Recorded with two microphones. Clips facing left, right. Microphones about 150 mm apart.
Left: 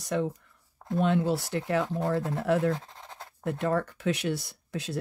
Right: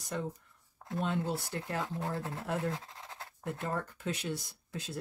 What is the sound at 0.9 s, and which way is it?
Speech, 90° left.